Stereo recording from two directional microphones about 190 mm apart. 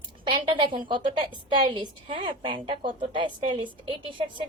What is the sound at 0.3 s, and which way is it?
A woman's voice, 25° right (ahead or behind).